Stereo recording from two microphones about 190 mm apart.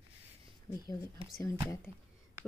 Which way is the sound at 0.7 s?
20° left (ahead or behind).